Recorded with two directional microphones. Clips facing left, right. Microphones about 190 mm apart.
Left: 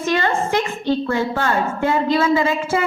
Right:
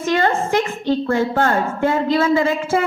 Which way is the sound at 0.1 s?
50° right (ahead or behind).